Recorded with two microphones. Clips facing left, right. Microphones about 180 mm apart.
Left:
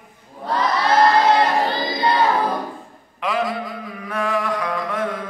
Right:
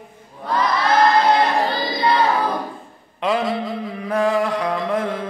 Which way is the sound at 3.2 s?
25° right (ahead or behind).